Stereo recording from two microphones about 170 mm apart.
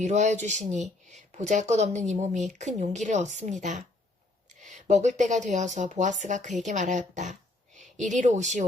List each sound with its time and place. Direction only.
0.0 s speech: 45° right (ahead or behind)